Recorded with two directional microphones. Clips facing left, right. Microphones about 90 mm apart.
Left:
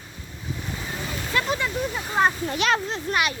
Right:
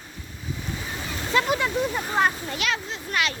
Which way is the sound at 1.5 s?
10° right (ahead or behind).